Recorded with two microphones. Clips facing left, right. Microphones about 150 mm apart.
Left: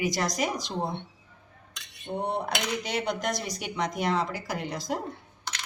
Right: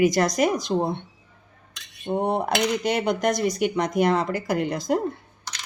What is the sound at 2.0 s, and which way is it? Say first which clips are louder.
Speech: right 6 dB; 60° right (ahead or behind).